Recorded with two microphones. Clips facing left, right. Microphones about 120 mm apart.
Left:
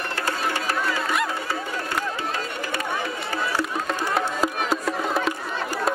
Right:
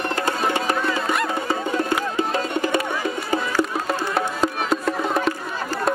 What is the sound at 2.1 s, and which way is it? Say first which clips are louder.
Music: right 6 dB; 20° right (ahead or behind).